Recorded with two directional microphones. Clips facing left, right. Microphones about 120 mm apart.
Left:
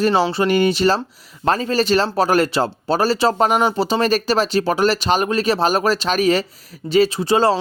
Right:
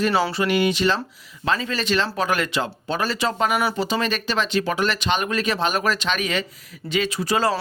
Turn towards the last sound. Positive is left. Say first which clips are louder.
# left 5 dB
turn(degrees=30)  # may be behind; listen again after turning